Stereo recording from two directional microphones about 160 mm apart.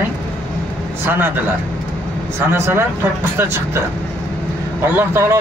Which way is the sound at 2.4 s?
15° right (ahead or behind).